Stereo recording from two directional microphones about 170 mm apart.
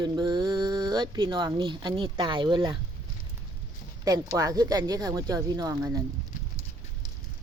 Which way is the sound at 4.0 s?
20° right (ahead or behind).